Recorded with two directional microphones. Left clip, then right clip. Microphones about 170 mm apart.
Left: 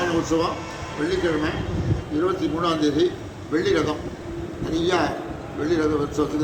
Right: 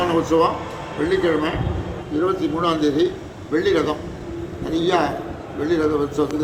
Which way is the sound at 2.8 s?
40° right (ahead or behind).